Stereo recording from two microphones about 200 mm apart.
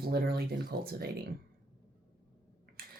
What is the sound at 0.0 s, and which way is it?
Speech, 50° right (ahead or behind).